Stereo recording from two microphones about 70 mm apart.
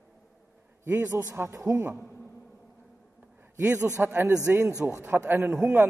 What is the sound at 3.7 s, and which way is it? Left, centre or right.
Speech, right.